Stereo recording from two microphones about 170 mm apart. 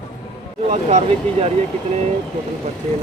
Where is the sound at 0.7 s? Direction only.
40° right (ahead or behind).